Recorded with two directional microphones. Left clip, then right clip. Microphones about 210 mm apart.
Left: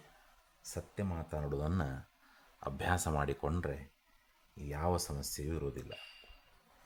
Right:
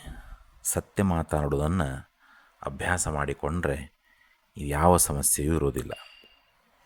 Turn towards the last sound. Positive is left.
turn(degrees=-40)  # may be behind; listen again after turning